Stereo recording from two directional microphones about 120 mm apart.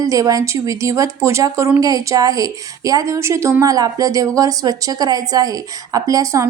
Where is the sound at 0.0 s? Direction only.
30° right (ahead or behind).